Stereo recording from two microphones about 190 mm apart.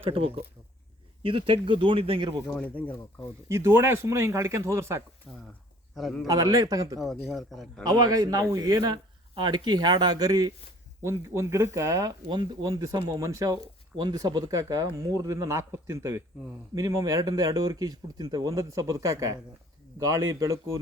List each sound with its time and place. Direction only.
0.0 s speech: 30° right (ahead or behind)
2.6 s speech: 10° left (ahead or behind)
3.5 s speech: 10° right (ahead or behind)
5.3 s a man's voice: centre (ahead or behind)
6.2 s speech: 20° right (ahead or behind)
7.3 s a man's voice: centre (ahead or behind)
7.9 s speech: 20° right (ahead or behind)